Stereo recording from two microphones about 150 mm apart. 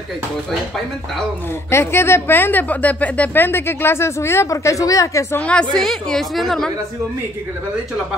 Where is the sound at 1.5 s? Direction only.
15° left (ahead or behind); by 6.7 s centre (ahead or behind).